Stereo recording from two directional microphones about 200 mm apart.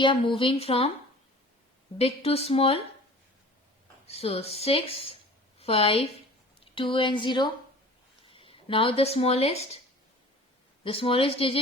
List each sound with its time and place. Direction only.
0.0 s speech: 25° left (ahead or behind)
2.0 s speech: 30° left (ahead or behind)
4.0 s a woman's voice: 30° left (ahead or behind)
10.8 s speech: 25° left (ahead or behind)